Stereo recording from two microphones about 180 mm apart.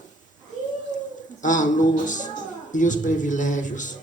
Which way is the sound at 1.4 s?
45° left (ahead or behind).